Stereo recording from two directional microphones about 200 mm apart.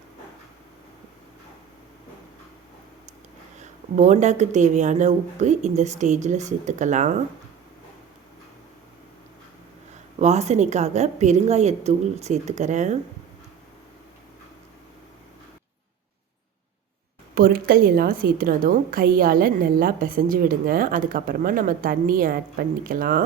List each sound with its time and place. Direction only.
3.6 s speech: 35° right (ahead or behind)
10.2 s speech: 35° right (ahead or behind)
17.3 s a woman's voice: 45° right (ahead or behind)